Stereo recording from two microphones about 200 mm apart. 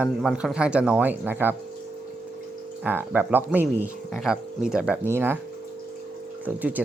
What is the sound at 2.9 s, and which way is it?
Speech, 10° right (ahead or behind).